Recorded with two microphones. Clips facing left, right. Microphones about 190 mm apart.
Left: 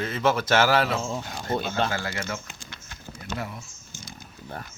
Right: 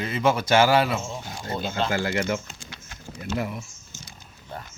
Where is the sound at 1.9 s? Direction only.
15° right (ahead or behind).